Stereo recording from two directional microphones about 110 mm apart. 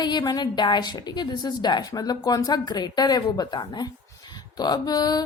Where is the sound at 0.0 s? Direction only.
40° left (ahead or behind).